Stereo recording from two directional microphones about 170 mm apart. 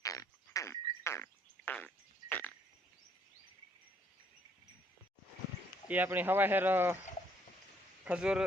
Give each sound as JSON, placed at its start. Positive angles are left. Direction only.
{"t": 0.0, "sound": "a sound", "side_deg": 20}
{"t": 5.9, "sound": "speech", "side_deg": -10}
{"t": 8.0, "sound": "speech", "side_deg": -5}